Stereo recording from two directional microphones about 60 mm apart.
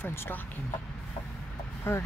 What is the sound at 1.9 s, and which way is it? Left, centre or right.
Speech, left.